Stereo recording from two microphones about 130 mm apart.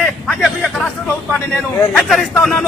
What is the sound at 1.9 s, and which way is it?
Speech, centre (ahead or behind).